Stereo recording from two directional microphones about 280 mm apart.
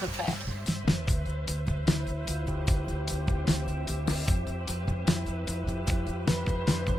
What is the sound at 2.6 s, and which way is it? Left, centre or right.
Music, centre.